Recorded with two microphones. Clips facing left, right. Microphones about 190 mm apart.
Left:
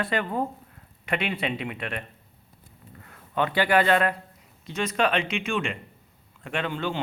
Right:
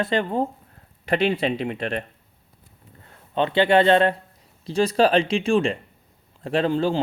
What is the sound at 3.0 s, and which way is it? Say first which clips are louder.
A man's voice: right 3 dB; 25° right (ahead or behind).